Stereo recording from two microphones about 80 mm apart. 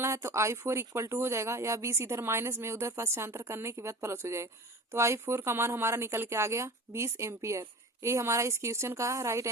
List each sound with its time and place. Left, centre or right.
0.0 s speech: right